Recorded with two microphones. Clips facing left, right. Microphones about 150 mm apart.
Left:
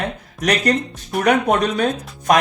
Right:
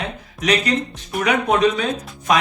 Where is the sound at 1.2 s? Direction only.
50° left (ahead or behind).